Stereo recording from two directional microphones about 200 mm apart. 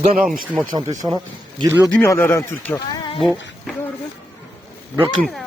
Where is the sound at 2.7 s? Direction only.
20° left (ahead or behind).